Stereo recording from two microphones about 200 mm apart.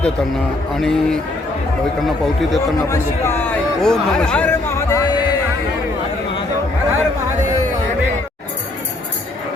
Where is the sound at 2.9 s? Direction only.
15° left (ahead or behind).